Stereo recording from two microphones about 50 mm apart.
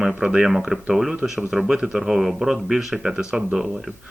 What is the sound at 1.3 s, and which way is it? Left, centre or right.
A man's voice, centre.